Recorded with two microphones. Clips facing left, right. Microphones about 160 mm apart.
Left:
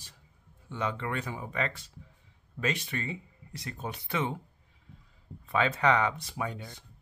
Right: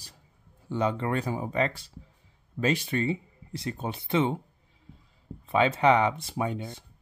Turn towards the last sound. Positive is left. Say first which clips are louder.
# right 5 dB
turn(degrees=-25)  # may be behind; listen again after turning